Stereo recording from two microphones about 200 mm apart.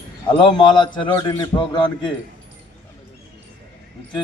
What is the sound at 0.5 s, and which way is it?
A man's voice, 25° left (ahead or behind).